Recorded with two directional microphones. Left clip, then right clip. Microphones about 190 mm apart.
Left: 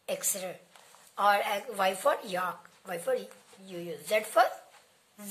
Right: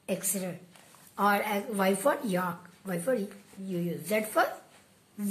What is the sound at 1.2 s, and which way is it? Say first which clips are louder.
A woman's voice: left 1 dB; 30° left (ahead or behind).